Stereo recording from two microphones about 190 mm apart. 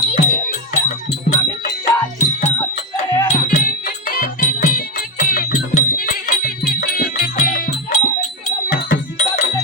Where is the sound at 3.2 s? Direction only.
40° left (ahead or behind).